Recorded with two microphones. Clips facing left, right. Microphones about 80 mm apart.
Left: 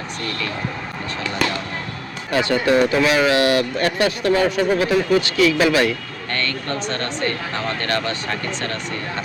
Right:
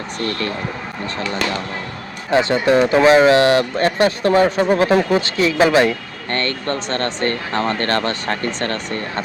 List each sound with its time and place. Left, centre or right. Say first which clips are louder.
2.3 s speech: right 3 dB; right
6.3 s speech: right 3 dB; right